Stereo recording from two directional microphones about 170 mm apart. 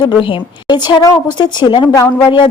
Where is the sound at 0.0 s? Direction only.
25° left (ahead or behind).